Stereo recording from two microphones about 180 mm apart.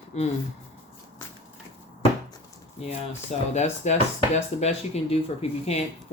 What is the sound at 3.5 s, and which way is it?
Speech, 40° left (ahead or behind).